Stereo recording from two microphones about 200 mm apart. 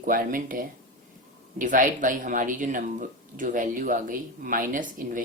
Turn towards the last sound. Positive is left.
turn(degrees=-40)  # may be behind; listen again after turning